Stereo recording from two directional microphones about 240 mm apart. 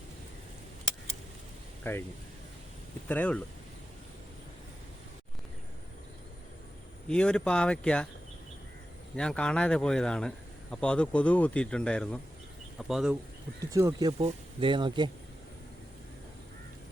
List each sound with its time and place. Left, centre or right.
1.8 s speech: centre
3.1 s speech: centre
7.1 s speech: centre
9.1 s speech: centre
13.6 s speech: centre